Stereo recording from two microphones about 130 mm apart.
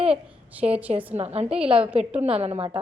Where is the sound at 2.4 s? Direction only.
50° right (ahead or behind).